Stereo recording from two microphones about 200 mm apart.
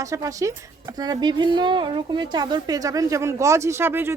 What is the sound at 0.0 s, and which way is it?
A woman's voice, 15° right (ahead or behind).